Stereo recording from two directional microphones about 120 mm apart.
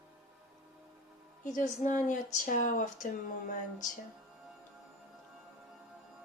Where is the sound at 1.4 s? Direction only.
90° left.